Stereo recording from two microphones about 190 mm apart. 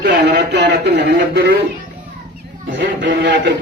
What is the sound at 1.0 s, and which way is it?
Speech, 65° right (ahead or behind).